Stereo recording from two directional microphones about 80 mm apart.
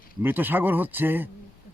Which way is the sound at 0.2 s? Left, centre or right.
Right.